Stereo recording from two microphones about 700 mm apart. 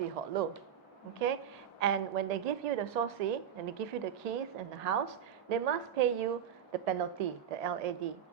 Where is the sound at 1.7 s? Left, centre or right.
Right.